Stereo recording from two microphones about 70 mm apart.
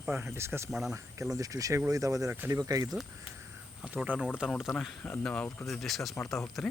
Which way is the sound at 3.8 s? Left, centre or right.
Right.